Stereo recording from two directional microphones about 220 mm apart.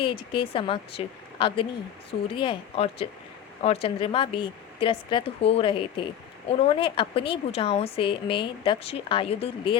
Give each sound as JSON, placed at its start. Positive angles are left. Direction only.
{"t": 0.0, "sound": "speech", "side_deg": 25}